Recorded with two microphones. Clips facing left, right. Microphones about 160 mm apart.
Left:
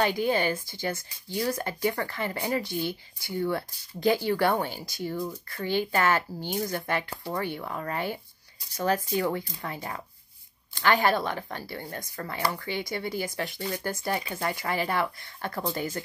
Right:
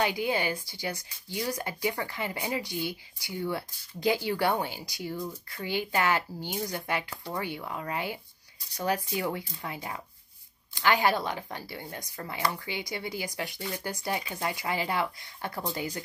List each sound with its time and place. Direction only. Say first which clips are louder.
0.2 s speech: left 3 dB; 10° right (ahead or behind)